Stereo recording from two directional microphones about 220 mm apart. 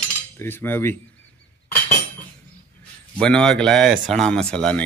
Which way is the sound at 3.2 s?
5° left (ahead or behind).